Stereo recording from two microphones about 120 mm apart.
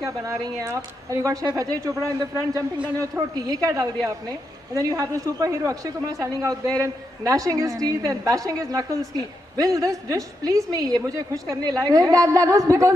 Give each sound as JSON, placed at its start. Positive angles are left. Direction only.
{"t": 0.0, "sound": "speech", "side_deg": -25}